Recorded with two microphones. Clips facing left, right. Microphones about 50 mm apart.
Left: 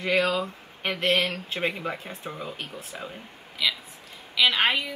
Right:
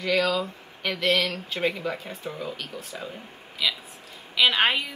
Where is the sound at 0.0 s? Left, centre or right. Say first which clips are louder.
Even; left.